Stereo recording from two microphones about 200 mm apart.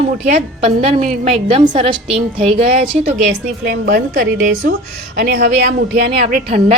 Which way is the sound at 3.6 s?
55° right (ahead or behind).